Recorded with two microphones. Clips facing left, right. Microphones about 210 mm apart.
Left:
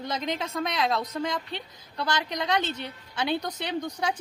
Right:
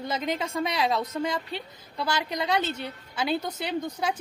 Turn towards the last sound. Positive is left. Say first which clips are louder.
# right 1 dB
turn(degrees=-5)  # may be behind; listen again after turning